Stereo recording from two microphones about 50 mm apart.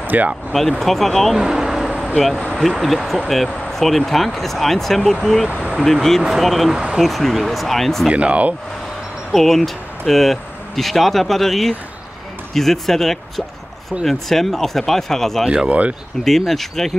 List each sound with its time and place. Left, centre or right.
0.0 s vehicle: right
0.5 s speech: centre
1.4 s vehicle: centre
2.6 s speech: centre
5.5 s speech: right
6.2 s speech: centre
6.7 s speech: centre
7.0 s speech: centre
8.1 s speech: right
9.3 s speech: centre
15.4 s speech: centre
16.3 s speech: centre